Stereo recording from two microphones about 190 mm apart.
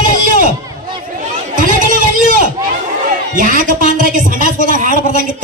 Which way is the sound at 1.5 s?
45° right (ahead or behind).